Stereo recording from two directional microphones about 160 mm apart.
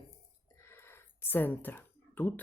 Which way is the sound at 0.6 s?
15° left (ahead or behind).